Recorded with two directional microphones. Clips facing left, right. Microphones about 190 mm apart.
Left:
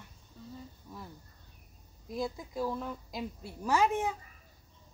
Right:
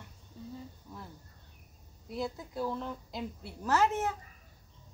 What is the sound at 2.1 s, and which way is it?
A woman's voice, 10° left (ahead or behind).